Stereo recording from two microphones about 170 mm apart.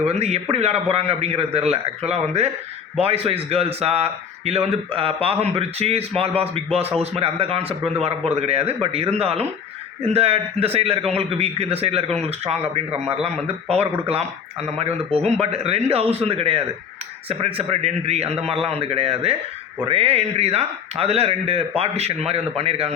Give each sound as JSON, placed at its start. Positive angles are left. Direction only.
{"t": 0.0, "sound": "a man's voice", "side_deg": -40}